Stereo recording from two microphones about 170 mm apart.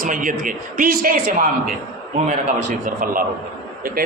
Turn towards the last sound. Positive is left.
turn(degrees=-55)  # may be behind; listen again after turning